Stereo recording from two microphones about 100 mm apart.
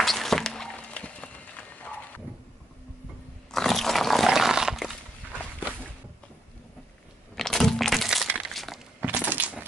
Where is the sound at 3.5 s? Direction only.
5° left (ahead or behind).